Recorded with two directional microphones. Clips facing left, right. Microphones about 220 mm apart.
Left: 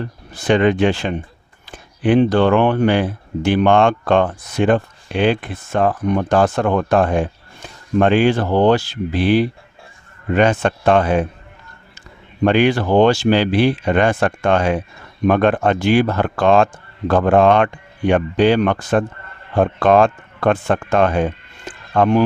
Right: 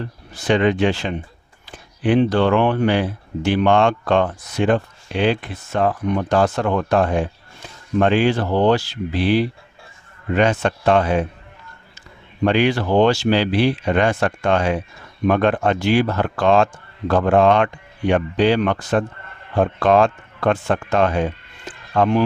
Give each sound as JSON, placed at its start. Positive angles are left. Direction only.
{"t": 0.3, "sound": "speech", "side_deg": 50}
{"t": 12.5, "sound": "speech", "side_deg": 50}